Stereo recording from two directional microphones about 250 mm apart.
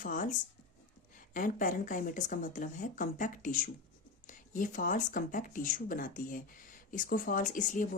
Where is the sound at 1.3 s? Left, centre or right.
Left.